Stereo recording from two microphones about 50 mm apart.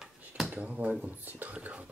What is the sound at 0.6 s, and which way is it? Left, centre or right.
Speech, right.